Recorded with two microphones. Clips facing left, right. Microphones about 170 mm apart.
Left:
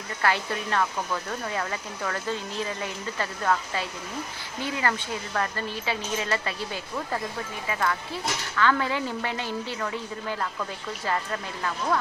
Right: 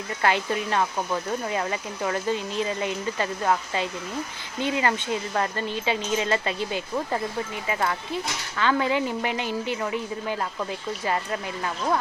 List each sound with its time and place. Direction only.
0.2 s speech: 20° right (ahead or behind)